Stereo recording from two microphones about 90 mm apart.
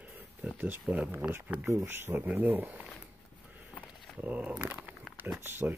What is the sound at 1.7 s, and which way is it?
Speech, 30° right (ahead or behind).